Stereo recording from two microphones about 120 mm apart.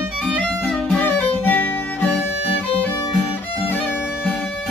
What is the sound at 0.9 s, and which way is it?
Music, 15° left (ahead or behind).